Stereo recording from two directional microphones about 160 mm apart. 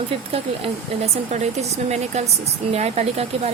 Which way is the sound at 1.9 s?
45° right (ahead or behind).